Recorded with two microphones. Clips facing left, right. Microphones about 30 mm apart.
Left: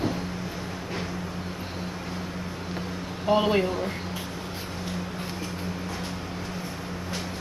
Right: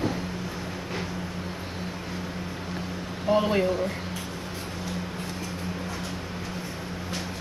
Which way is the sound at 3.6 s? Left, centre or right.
Centre.